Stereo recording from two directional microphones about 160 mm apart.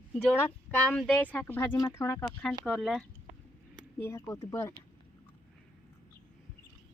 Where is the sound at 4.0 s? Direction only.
15° left (ahead or behind).